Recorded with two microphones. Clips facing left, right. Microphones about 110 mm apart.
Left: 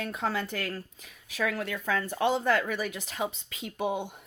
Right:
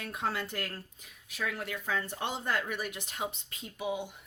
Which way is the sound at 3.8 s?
50° left (ahead or behind).